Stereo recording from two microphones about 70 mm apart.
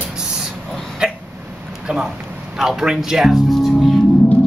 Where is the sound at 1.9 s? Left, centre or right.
Centre.